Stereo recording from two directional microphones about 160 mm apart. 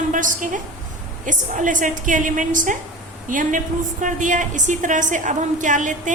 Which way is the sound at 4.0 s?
55° right (ahead or behind).